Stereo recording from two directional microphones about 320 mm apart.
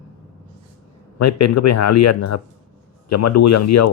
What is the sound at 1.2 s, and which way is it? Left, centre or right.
Speech, left.